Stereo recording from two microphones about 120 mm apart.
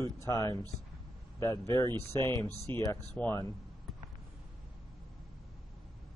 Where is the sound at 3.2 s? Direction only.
10° left (ahead or behind).